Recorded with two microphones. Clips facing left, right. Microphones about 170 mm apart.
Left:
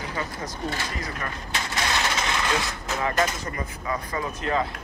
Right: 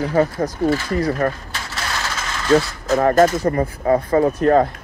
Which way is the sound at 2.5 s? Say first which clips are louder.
Right 12 dB; 50° right (ahead or behind).